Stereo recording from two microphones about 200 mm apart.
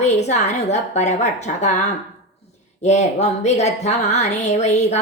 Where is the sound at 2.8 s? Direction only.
35° left (ahead or behind).